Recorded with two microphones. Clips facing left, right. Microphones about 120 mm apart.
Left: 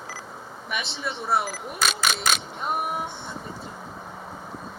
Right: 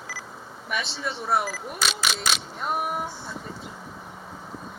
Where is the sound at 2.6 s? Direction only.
Centre (ahead or behind).